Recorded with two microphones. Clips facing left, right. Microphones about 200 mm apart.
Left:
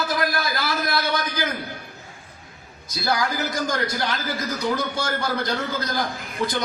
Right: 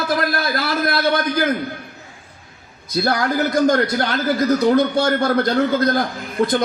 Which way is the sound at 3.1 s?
55° right (ahead or behind).